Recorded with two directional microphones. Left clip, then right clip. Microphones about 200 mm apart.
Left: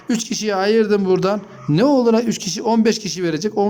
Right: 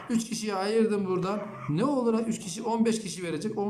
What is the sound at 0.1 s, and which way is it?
A man's voice, 45° left (ahead or behind).